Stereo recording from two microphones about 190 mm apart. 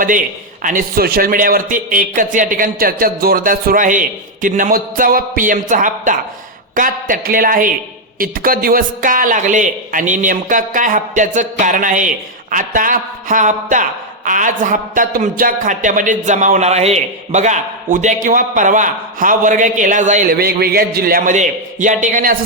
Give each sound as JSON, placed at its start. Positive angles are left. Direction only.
{"t": 0.6, "sound": "a man's voice", "side_deg": -45}
{"t": 20.3, "sound": "a man's voice", "side_deg": -55}